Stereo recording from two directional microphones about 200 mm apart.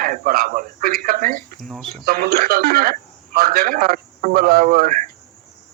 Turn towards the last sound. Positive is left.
turn(degrees=-45)  # may be behind; listen again after turning